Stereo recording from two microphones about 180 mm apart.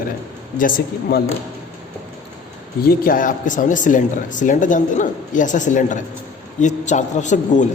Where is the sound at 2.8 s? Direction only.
50° left (ahead or behind).